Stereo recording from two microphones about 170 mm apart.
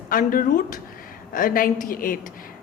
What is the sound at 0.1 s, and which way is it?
A woman's voice, 55° left (ahead or behind).